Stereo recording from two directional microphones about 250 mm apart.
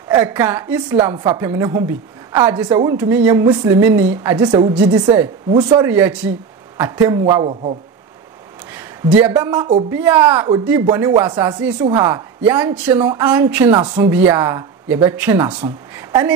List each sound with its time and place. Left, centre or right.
0.1 s a woman's voice: centre
8.7 s speech: centre
9.8 s a woman's voice: centre